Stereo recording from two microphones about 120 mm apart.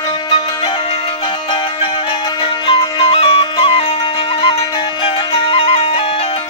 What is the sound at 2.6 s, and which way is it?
Music, 55° left (ahead or behind).